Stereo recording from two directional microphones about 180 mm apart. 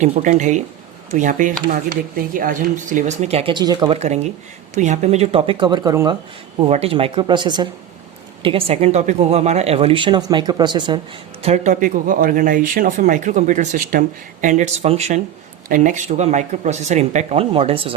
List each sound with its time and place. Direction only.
0.0 s speech: 45° right (ahead or behind); by 3.9 s 25° right (ahead or behind)
3.9 s speech: 35° right (ahead or behind); by 6.1 s 20° right (ahead or behind)
6.6 s speech: 35° right (ahead or behind)
11.4 s speech: 40° right (ahead or behind)